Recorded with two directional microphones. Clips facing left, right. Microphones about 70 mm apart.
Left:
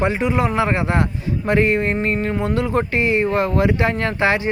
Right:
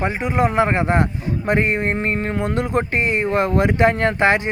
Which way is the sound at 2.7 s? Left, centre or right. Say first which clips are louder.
Left 2 dB; right.